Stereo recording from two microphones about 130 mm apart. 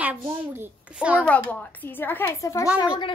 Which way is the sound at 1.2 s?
15° left (ahead or behind).